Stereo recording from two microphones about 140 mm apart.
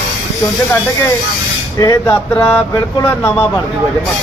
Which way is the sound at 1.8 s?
25° left (ahead or behind).